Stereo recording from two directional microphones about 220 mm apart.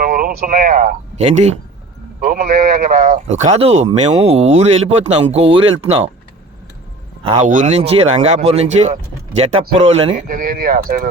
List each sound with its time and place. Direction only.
0.0 s speech: 40° right (ahead or behind)
2.2 s a man's voice: 40° right (ahead or behind); by 6.0 s 25° right (ahead or behind)
7.3 s a man's voice: 35° right (ahead or behind)
10.2 s speech: 40° right (ahead or behind)